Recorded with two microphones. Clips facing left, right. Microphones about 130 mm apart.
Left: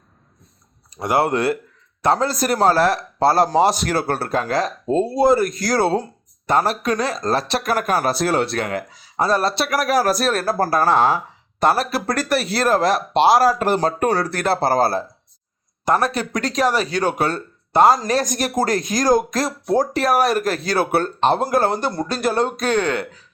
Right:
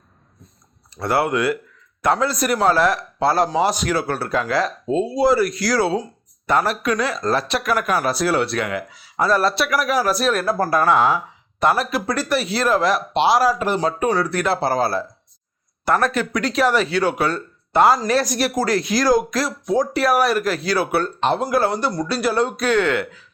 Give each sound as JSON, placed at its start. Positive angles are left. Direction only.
{"t": 0.9, "sound": "a sound", "side_deg": 15}
{"t": 1.2, "sound": "speech", "side_deg": 30}
{"t": 6.5, "sound": "speech", "side_deg": 35}
{"t": 9.6, "sound": "speech", "side_deg": 40}
{"t": 15.8, "sound": "speech", "side_deg": 20}
{"t": 16.3, "sound": "speech", "side_deg": 40}